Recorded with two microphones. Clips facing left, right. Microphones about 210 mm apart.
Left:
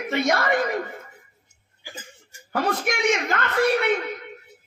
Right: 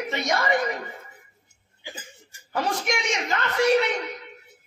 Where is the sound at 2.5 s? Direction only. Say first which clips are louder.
Left 2 dB; 55° left (ahead or behind).